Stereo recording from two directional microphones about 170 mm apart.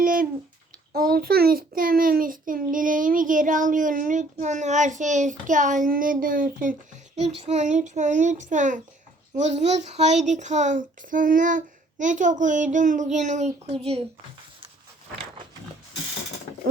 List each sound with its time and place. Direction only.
0.0 s a sound: 55° right (ahead or behind)
0.9 s a child's voice: 60° right (ahead or behind)
7.2 s a child's voice: 40° right (ahead or behind)